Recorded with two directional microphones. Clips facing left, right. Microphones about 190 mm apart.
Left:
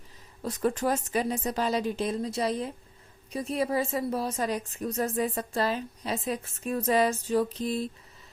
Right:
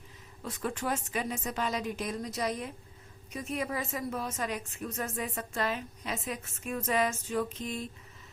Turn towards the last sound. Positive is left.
turn(degrees=35)  # may be behind; listen again after turning